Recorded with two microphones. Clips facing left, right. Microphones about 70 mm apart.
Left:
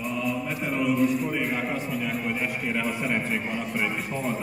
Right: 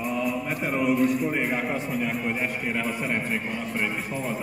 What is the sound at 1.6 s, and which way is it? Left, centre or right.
A man's voice, centre.